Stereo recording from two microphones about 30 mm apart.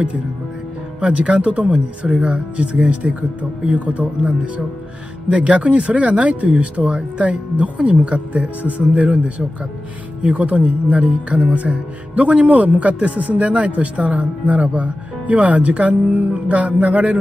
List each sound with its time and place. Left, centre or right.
1.0 s a man's voice: right
5.3 s a man's voice: right
7.2 s a man's voice: right
10.2 s a man's voice: right